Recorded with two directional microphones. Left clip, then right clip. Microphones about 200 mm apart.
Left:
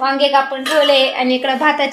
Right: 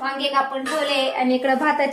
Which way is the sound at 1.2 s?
20° left (ahead or behind).